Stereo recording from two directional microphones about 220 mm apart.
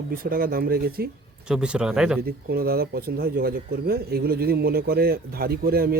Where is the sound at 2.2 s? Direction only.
45° right (ahead or behind).